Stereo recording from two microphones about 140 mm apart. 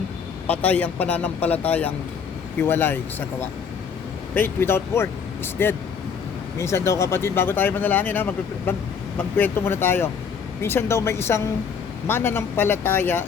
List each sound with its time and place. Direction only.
0.4 s speech: 10° left (ahead or behind)
4.4 s a woman's voice: 15° left (ahead or behind)